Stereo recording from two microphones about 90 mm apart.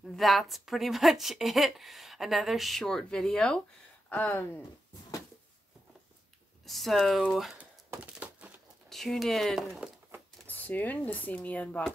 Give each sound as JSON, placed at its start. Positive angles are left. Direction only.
{"t": 0.0, "sound": "a woman's voice", "side_deg": 0}
{"t": 6.6, "sound": "a woman's voice", "side_deg": 0}
{"t": 7.5, "sound": "a sound", "side_deg": -15}
{"t": 8.8, "sound": "a woman's voice", "side_deg": 5}
{"t": 10.4, "sound": "speech", "side_deg": 20}